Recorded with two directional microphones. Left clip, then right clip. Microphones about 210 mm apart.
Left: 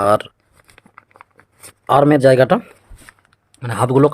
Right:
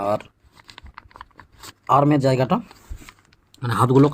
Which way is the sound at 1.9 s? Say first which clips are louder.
Left 6 dB; 35° left (ahead or behind).